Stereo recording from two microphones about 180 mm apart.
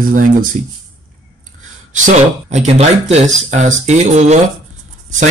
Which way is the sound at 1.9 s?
45° right (ahead or behind).